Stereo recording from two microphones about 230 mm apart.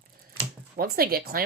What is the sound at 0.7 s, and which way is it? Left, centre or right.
Speech, right.